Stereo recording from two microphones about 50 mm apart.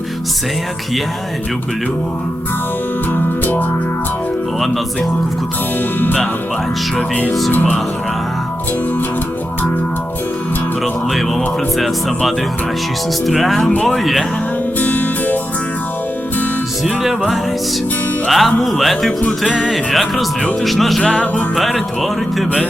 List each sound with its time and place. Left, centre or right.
3.1 s music: left
7.5 s music: left
11.1 s speech: centre
13.6 s speech: centre
13.8 s speech: centre
14.8 s music: left
16.8 s speech: centre
18.3 s speech: centre
21.0 s music: left
21.5 s speech: centre